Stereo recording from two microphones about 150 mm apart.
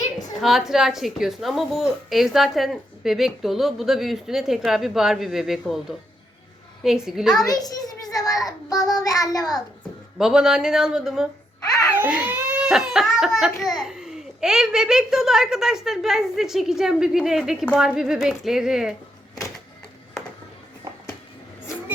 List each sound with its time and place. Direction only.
0.4 s a woman's voice: centre (ahead or behind)
7.4 s a child's voice: 25° left (ahead or behind)
10.2 s a woman's voice: 5° right (ahead or behind)